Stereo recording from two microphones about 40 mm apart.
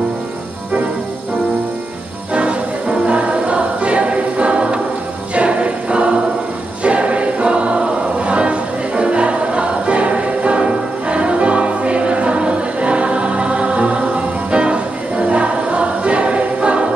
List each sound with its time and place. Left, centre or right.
2.3 s music: right
5.3 s choir: right
6.8 s music: right